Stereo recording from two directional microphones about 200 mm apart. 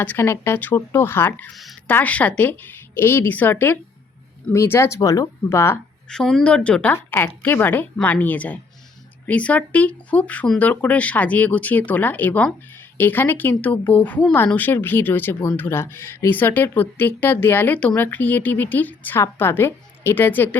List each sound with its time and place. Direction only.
0.0 s speech: 10° left (ahead or behind)
6.1 s speech: 5° left (ahead or behind)